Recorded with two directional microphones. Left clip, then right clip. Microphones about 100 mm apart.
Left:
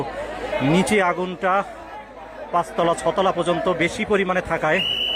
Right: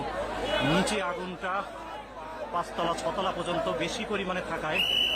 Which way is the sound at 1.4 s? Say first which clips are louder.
Left 11 dB; 50° left (ahead or behind).